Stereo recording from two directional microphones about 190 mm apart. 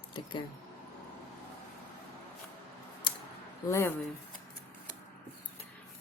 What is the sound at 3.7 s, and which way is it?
Speech, 10° left (ahead or behind).